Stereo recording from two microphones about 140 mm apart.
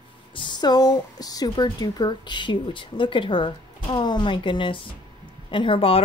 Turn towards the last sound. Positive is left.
turn(degrees=40)  # may be behind; listen again after turning